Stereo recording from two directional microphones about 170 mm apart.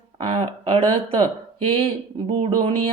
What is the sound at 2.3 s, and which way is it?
Speech, 35° right (ahead or behind).